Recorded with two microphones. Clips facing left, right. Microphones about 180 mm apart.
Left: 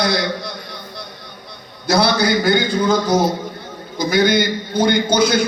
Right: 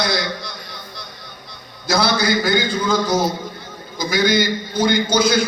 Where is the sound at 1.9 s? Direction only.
60° left (ahead or behind).